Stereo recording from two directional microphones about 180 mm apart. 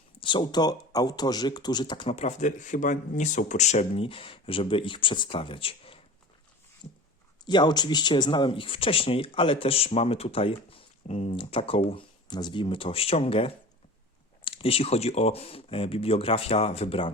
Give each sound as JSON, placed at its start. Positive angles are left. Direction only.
{"t": 0.2, "sound": "speech", "side_deg": 25}
{"t": 6.8, "sound": "a sound", "side_deg": 45}
{"t": 7.4, "sound": "speech", "side_deg": 25}